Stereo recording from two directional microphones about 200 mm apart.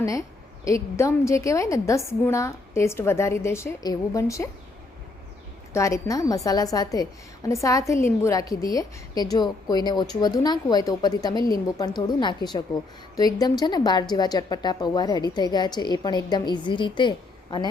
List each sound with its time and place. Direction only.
0.0 s a woman's voice: 15° left (ahead or behind)
5.7 s a woman's voice: 15° left (ahead or behind)